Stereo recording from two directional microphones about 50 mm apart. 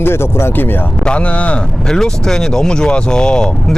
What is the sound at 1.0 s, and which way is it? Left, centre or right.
Speech, left.